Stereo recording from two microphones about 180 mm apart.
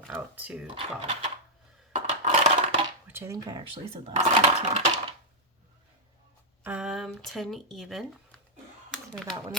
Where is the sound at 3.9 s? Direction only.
35° right (ahead or behind).